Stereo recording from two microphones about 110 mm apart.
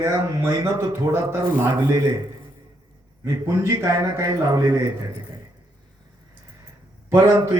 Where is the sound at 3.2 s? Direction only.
30° right (ahead or behind).